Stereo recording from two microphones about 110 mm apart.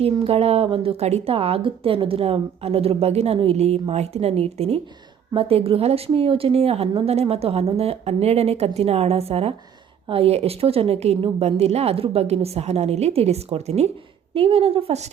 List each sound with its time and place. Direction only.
0.0 s a woman's voice: 65° right (ahead or behind)
14.3 s a woman's voice: 60° right (ahead or behind); by 15.1 s 75° right (ahead or behind)